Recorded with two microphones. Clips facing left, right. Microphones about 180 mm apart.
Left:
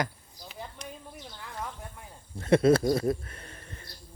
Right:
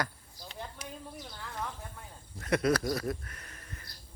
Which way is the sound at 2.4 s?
25° left (ahead or behind).